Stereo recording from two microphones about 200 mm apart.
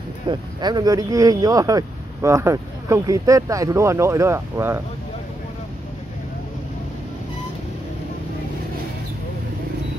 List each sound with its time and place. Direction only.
0.3 s speech: 20° right (ahead or behind)